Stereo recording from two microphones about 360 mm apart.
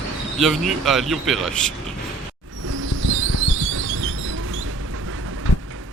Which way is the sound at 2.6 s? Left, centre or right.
Right.